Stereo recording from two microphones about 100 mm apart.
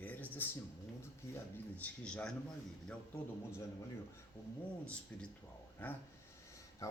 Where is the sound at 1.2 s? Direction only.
30° left (ahead or behind).